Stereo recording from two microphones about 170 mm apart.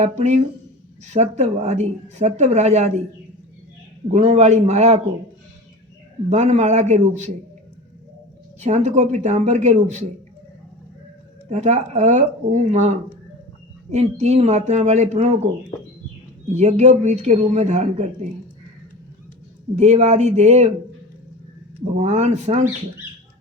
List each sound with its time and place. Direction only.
0.0 s a woman's voice: 40° right (ahead or behind)
4.1 s a woman's voice: 40° right (ahead or behind)
6.3 s speech: 40° right (ahead or behind)
8.6 s speech: 40° right (ahead or behind)
11.4 s speech: 40° right (ahead or behind)
13.9 s a woman's voice: 40° right (ahead or behind)
16.5 s a woman's voice: 40° right (ahead or behind)
19.7 s a woman's voice: 40° right (ahead or behind)
21.9 s a woman's voice: 40° right (ahead or behind)